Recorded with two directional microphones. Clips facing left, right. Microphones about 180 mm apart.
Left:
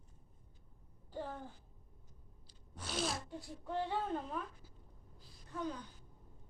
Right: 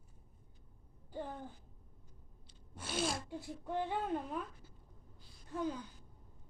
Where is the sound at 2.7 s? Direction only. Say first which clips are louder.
Right 2 dB; centre (ahead or behind).